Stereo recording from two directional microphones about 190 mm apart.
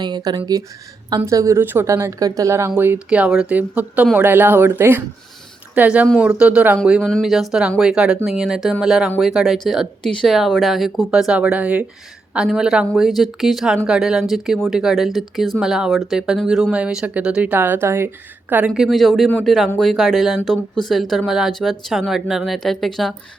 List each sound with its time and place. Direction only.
0.0 s speech: 20° right (ahead or behind); by 23.1 s centre (ahead or behind)